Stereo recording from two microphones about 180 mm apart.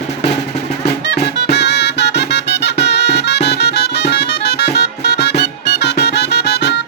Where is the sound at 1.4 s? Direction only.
70° left (ahead or behind).